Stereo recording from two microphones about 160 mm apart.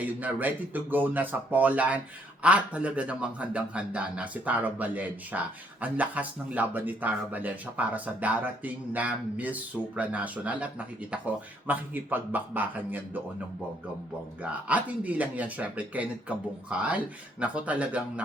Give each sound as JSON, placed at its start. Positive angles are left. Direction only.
{"t": 0.0, "sound": "speech", "side_deg": -10}
{"t": 14.7, "sound": "speech", "side_deg": -10}